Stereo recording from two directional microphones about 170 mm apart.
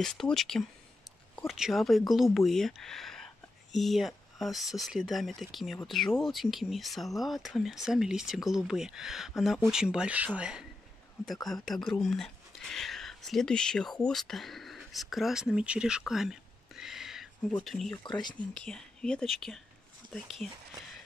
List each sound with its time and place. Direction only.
0.0 s speech: centre (ahead or behind)
18.0 s speech: 25° left (ahead or behind)
18.5 s speech: 5° left (ahead or behind)